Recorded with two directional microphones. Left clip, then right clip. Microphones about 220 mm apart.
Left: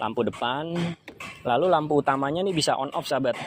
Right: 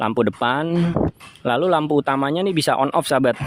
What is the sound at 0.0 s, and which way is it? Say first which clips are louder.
Speech: right 7 dB; 35° right (ahead or behind).